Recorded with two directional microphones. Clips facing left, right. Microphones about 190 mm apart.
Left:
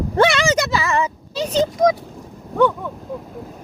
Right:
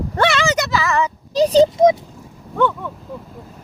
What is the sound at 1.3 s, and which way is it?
Speech, 35° right (ahead or behind).